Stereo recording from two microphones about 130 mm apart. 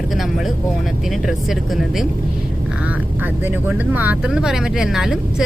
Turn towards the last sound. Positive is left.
turn(degrees=-5)  # may be behind; listen again after turning